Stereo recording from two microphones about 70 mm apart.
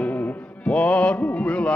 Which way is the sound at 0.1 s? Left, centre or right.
Left.